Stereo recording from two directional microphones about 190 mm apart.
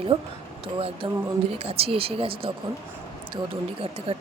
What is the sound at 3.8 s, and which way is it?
Speech, 30° right (ahead or behind).